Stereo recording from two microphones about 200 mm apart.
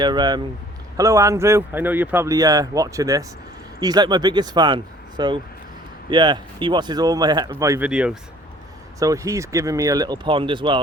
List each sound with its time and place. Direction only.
0.0 s speech: 20° right (ahead or behind)
7.9 s speech: 5° right (ahead or behind)
9.0 s speech: 15° right (ahead or behind)